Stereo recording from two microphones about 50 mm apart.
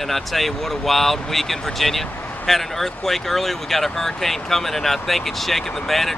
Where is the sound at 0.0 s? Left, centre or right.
Centre.